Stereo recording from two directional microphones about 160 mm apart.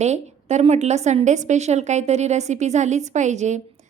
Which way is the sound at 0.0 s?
45° right (ahead or behind).